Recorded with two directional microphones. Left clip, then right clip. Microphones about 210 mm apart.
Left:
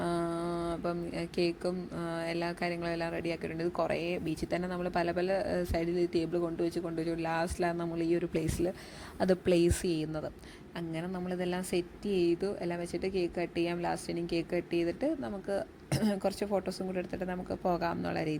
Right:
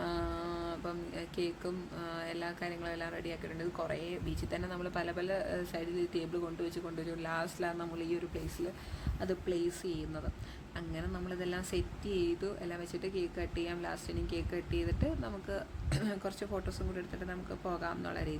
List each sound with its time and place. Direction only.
0.0 s mantra: 25° left (ahead or behind)
0.5 s speech: 25° left (ahead or behind)
9.1 s speech: 35° left (ahead or behind)